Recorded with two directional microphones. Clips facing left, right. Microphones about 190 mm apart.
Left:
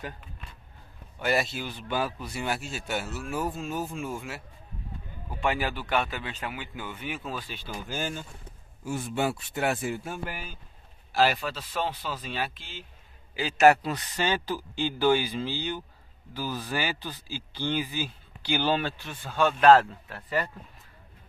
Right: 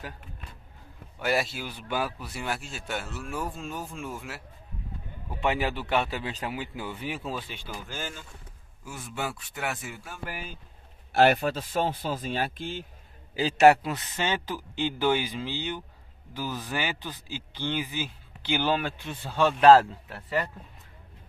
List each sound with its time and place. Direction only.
1.2 s a man's voice: 5° right (ahead or behind)
5.4 s a man's voice: 25° right (ahead or behind)
7.4 s speech: 15° right (ahead or behind)
7.9 s speech: 20° left (ahead or behind)
8.8 s a man's voice: 30° left (ahead or behind)
11.1 s speech: 60° right (ahead or behind)
13.8 s speech: 20° right (ahead or behind)
19.1 s a man's voice: 30° right (ahead or behind)
20.1 s speech: 10° right (ahead or behind)